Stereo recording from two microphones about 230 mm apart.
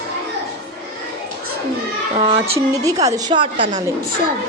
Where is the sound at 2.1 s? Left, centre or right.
Right.